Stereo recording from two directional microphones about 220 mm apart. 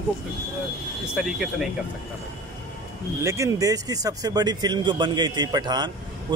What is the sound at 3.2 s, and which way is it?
A man's voice, 15° right (ahead or behind).